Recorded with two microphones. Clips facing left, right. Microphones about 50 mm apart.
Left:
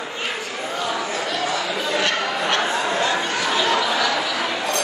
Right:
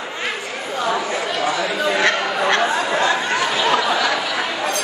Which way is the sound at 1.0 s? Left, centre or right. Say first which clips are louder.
Right 3 dB; right.